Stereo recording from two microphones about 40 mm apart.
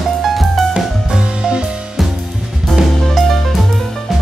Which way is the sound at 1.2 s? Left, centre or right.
Right.